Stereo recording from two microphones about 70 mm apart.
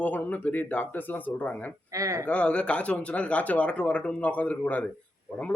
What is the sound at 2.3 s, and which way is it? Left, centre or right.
Speech, centre.